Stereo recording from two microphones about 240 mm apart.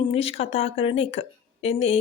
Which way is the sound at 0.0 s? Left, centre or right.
Left.